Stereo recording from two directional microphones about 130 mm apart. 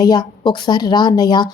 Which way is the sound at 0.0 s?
30° left (ahead or behind).